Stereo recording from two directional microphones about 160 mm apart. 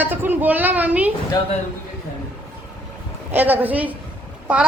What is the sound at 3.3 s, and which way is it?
Speech, 10° right (ahead or behind).